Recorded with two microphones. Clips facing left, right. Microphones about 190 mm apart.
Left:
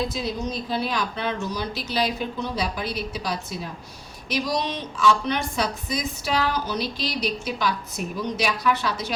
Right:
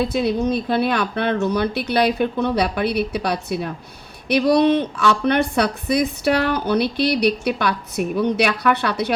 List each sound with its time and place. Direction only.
0.0 s speech: 60° right (ahead or behind)